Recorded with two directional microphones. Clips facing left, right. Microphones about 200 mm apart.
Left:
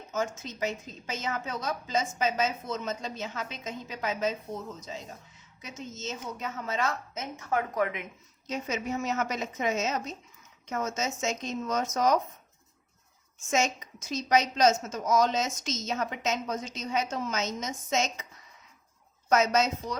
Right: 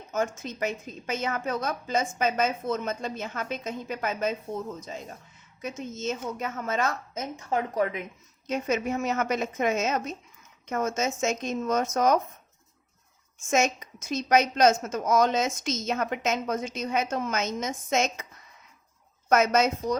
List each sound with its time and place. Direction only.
0.1 s a woman's voice: 55° right (ahead or behind)
5.6 s a woman's voice: 55° right (ahead or behind); by 8.0 s 35° right (ahead or behind)
8.4 s a woman's voice: 55° right (ahead or behind)
13.5 s a woman's voice: 50° right (ahead or behind)
19.3 s a woman's voice: 55° right (ahead or behind)